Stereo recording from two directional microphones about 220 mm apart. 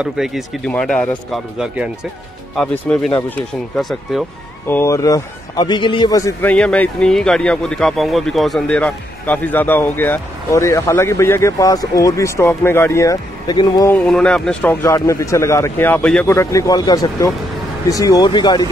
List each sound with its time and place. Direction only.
0.0 s speech: centre (ahead or behind)
4.6 s speech: 10° left (ahead or behind)
6.5 s speech: 5° left (ahead or behind)